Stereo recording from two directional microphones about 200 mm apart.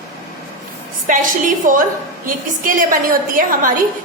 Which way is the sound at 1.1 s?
40° right (ahead or behind).